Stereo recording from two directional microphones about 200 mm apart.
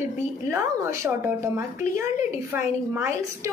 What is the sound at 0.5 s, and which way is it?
A woman's voice, 15° right (ahead or behind).